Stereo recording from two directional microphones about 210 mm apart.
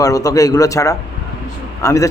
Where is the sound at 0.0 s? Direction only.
15° left (ahead or behind).